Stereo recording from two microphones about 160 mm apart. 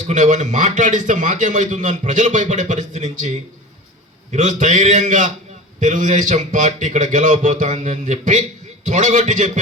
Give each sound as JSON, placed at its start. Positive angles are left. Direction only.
{"t": 0.1, "sound": "a man's voice", "side_deg": -50}